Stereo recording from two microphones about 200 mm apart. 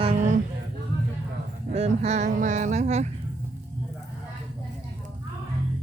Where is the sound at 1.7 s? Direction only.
30° right (ahead or behind).